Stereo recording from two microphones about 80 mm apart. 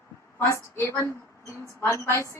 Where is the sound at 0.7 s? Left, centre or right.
Left.